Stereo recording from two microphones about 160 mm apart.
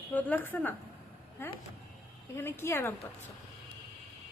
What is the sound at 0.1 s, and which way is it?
A woman's voice, 10° left (ahead or behind).